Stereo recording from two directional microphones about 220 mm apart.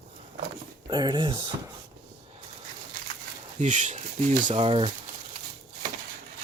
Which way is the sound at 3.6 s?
35° right (ahead or behind).